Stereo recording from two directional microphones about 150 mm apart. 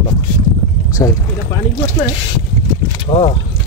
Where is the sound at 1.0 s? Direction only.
15° left (ahead or behind).